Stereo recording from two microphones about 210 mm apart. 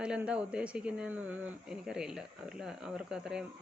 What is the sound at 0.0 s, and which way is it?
Speech, 5° right (ahead or behind).